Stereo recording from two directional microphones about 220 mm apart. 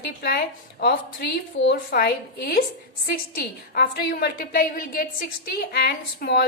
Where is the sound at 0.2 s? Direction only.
45° left (ahead or behind).